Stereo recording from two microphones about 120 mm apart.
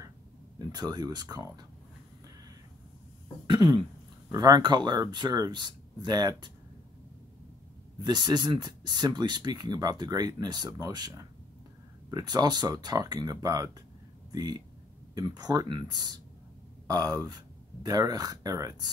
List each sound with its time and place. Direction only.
0.6 s speech: 35° right (ahead or behind)
3.4 s speech: 40° right (ahead or behind)
8.0 s speech: 35° right (ahead or behind)